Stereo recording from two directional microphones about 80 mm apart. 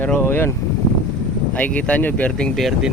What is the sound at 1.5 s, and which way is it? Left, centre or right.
Speech, centre.